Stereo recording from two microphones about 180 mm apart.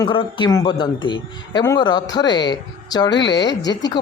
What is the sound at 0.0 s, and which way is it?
A man's voice, 25° left (ahead or behind).